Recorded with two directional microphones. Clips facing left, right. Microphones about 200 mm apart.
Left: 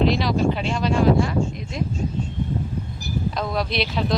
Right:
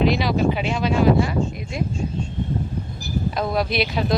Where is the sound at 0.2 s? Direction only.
5° right (ahead or behind).